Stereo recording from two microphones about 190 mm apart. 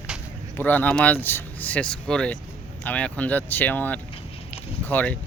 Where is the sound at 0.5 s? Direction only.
10° left (ahead or behind).